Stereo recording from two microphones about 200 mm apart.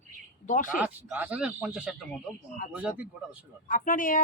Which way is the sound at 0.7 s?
5° right (ahead or behind).